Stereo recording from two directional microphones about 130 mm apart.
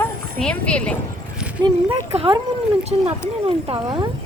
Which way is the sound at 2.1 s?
50° right (ahead or behind).